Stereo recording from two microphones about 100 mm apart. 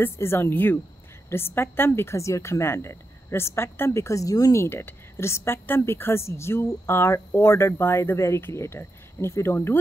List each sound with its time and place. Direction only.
0.0 s a woman's voice: 25° left (ahead or behind)
4.6 s a woman's voice: 25° left (ahead or behind)